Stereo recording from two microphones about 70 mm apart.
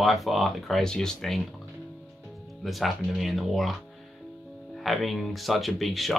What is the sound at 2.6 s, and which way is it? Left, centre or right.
Speech, centre.